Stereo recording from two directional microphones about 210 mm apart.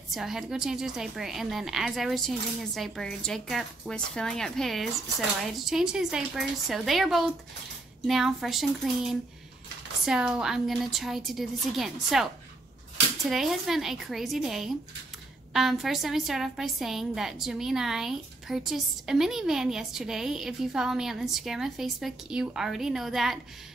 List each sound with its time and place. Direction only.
0.1 s a woman's voice: centre (ahead or behind)